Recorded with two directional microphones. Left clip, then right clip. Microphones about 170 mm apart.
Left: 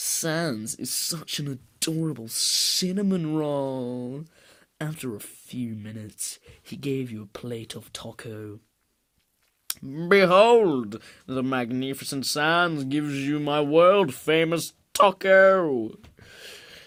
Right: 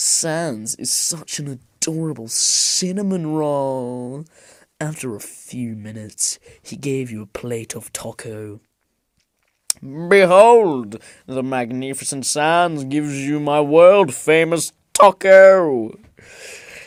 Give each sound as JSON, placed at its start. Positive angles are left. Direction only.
{"t": 0.0, "sound": "speech", "side_deg": -25}
{"t": 9.6, "sound": "speech", "side_deg": -30}